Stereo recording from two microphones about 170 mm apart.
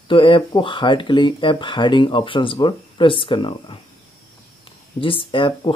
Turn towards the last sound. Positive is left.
turn(degrees=30)  # may be behind; listen again after turning